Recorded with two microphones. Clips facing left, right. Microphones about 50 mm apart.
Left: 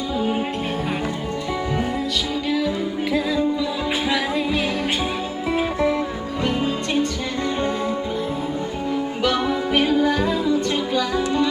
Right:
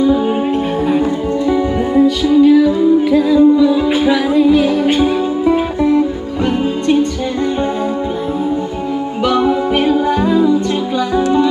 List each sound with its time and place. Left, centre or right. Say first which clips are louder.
0.0 s music: right 10 dB; centre
2.2 s music: right 16 dB; centre
9.2 s music: right 9 dB; centre